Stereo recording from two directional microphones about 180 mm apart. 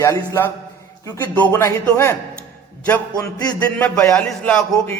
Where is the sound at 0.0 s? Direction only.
20° left (ahead or behind).